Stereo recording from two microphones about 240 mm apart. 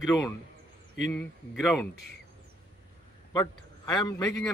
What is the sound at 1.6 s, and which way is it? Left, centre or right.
Speech, centre.